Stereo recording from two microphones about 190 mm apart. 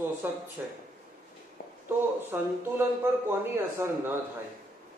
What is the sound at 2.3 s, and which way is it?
Speech, 10° right (ahead or behind).